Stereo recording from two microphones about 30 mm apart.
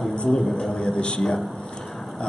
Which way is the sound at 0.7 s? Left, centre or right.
Left.